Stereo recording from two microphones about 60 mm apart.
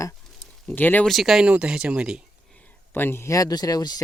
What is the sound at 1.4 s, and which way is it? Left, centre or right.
Speech, centre.